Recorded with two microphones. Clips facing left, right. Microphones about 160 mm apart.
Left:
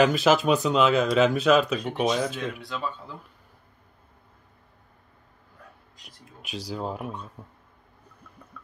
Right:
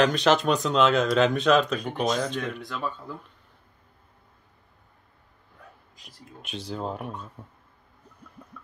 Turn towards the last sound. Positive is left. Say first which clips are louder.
# even
turn(degrees=0)  # may be behind; listen again after turning